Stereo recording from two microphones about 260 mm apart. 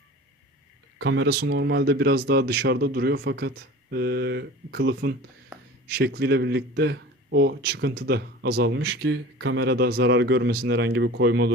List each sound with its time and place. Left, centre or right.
0.9 s speech: right
5.5 s a sound: centre
5.9 s speech: right